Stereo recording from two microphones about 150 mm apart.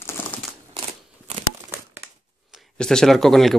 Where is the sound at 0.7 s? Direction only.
40° right (ahead or behind).